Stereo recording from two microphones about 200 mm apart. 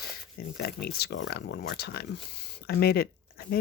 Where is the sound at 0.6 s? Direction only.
50° left (ahead or behind).